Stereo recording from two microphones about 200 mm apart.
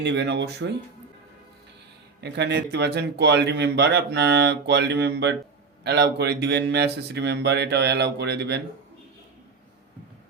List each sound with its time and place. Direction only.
0.0 s a man's voice: 60° right (ahead or behind)
2.2 s a man's voice: 60° right (ahead or behind)